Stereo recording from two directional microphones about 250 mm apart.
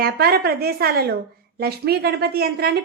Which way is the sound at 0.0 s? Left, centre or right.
Right.